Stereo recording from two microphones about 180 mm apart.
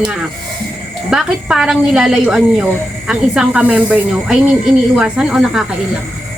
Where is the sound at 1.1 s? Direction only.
5° right (ahead or behind).